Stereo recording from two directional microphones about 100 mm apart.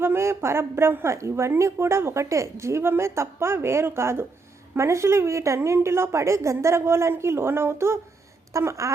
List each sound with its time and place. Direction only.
0.0 s a woman's voice: 25° right (ahead or behind)